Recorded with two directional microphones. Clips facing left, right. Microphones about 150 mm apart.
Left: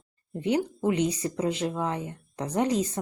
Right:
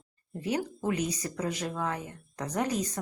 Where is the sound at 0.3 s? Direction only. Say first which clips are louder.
Left 5 dB; 25° left (ahead or behind).